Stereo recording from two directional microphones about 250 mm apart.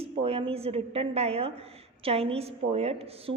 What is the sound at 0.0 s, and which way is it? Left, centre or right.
A woman's voice, right.